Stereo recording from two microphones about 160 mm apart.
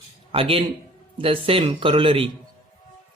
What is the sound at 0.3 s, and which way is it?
Speech, 35° right (ahead or behind).